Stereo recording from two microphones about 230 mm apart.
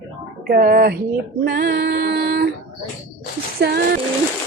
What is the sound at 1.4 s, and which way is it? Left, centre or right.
Female singing, right.